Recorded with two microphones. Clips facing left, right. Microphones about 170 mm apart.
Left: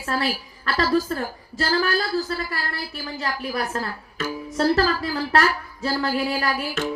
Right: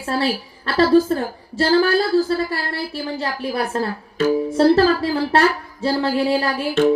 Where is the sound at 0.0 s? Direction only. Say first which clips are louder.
Right 4 dB; 30° right (ahead or behind).